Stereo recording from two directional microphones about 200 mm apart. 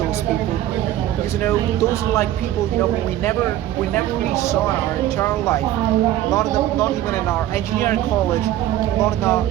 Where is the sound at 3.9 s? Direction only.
15° left (ahead or behind).